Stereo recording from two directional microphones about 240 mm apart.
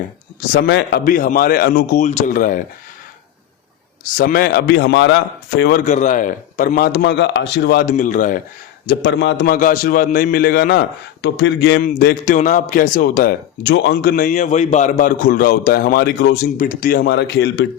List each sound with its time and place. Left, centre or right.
0.5 s a man's voice: left
4.2 s a man's voice: left
8.9 s a man's voice: left
11.9 s a man's voice: left